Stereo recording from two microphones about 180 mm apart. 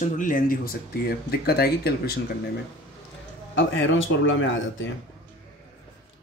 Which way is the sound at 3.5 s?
90° left.